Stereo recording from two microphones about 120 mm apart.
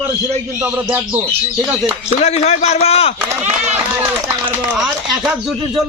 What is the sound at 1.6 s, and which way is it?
Speech, centre (ahead or behind).